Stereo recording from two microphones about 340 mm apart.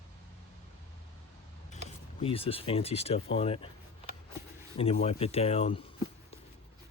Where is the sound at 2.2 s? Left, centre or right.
Centre.